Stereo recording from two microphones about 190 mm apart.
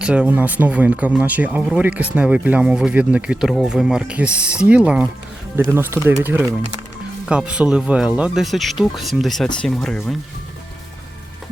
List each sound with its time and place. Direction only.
0.0 s speech: 5° right (ahead or behind)